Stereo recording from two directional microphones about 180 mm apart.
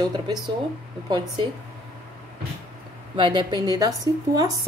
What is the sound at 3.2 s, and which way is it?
Speech, 25° right (ahead or behind).